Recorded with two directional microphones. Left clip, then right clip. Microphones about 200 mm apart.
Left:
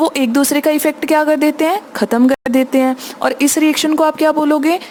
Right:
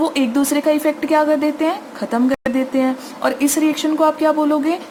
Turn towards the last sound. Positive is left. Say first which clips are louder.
# left 3 dB
turn(degrees=55)  # may be behind; listen again after turning